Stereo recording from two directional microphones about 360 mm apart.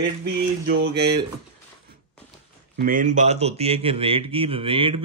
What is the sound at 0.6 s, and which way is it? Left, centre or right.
Speech, right.